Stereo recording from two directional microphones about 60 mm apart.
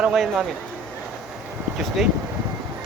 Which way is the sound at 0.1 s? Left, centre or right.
Centre.